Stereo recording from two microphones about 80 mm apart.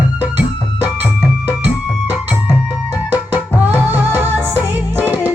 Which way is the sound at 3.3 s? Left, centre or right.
Right.